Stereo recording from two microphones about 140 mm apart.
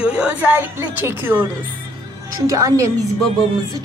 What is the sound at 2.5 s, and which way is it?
Speech, 25° right (ahead or behind).